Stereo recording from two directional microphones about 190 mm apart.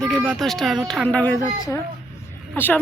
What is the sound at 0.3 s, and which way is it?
Speech, centre (ahead or behind).